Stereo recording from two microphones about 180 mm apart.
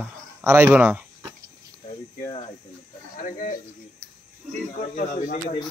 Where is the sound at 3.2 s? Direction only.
45° left (ahead or behind).